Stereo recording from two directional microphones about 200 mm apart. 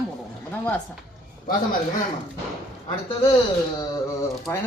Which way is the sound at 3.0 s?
20° left (ahead or behind).